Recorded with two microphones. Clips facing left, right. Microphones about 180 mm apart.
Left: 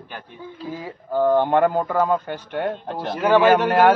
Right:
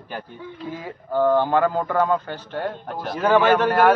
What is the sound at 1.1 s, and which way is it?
A man's voice, 15° left (ahead or behind).